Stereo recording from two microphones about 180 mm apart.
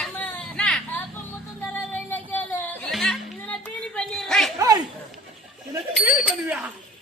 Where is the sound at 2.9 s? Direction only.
Centre (ahead or behind).